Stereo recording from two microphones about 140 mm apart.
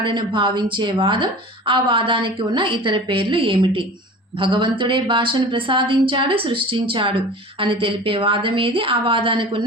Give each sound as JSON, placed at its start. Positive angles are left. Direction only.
{"t": 0.0, "sound": "a woman's voice", "side_deg": -35}